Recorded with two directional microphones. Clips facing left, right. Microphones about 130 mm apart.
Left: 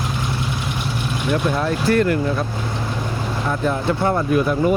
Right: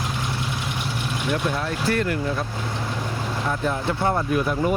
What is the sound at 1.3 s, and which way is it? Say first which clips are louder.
Speech: left 5 dB; 50° left (ahead or behind).